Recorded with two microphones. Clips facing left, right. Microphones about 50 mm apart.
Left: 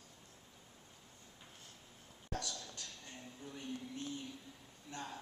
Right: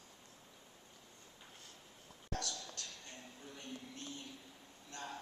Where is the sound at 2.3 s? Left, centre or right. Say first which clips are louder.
Even; centre.